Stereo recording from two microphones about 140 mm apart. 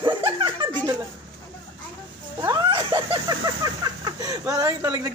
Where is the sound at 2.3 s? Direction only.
30° right (ahead or behind).